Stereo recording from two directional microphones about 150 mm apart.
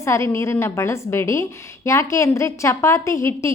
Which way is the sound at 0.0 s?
20° left (ahead or behind).